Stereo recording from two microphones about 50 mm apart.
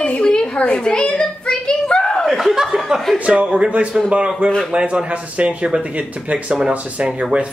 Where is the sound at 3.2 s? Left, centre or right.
Right.